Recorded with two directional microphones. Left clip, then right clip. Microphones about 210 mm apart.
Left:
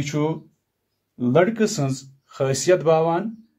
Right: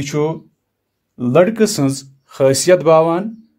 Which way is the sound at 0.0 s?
30° right (ahead or behind).